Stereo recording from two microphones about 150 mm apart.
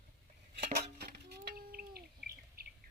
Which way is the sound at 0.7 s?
90° right.